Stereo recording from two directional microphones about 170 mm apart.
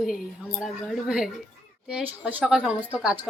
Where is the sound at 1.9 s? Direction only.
10° right (ahead or behind).